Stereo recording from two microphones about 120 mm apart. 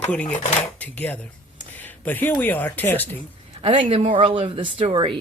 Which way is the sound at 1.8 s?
15° left (ahead or behind).